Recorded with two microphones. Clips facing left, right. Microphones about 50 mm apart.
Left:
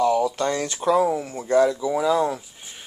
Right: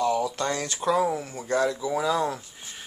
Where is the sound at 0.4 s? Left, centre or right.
Left.